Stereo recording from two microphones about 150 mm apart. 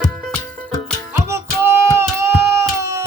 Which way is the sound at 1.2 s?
20° right (ahead or behind).